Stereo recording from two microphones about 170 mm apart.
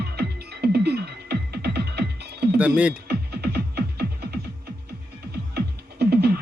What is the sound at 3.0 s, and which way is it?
Music, 70° right (ahead or behind).